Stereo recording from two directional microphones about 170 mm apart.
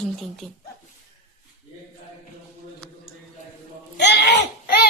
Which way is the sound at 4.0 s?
80° left.